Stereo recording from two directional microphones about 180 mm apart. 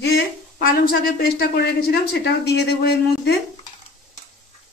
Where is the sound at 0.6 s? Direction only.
55° left (ahead or behind).